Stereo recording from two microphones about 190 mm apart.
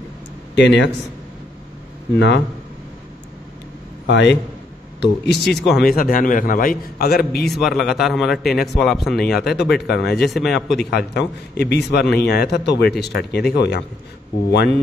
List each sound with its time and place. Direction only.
0.6 s speech: 65° left (ahead or behind)
2.1 s speech: 70° left (ahead or behind)
4.1 s a man's voice: 65° left (ahead or behind)
5.8 s a man's voice: 50° left (ahead or behind)
7.4 s a man's voice: centre (ahead or behind)
9.9 s a man's voice: 60° left (ahead or behind)
10.2 s a man's voice: centre (ahead or behind)
10.8 s a man's voice: 60° left (ahead or behind)